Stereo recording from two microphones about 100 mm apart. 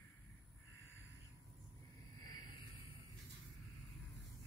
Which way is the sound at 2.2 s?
40° left (ahead or behind).